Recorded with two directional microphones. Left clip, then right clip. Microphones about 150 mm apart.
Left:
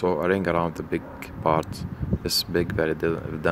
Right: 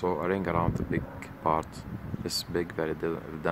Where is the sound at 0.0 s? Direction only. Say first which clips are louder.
Left 6 dB; 20° left (ahead or behind).